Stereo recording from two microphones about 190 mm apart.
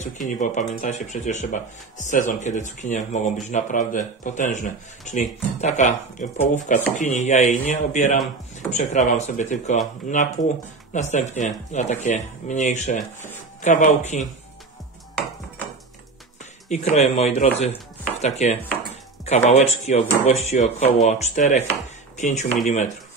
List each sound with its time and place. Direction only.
0.0 s speech: 40° left (ahead or behind)
16.6 s speech: 35° left (ahead or behind)